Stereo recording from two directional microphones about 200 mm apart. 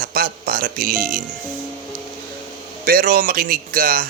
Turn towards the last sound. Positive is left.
turn(degrees=-45)  # may be behind; listen again after turning